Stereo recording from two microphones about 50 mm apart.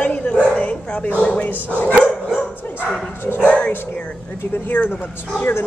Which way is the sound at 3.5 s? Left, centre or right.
Left.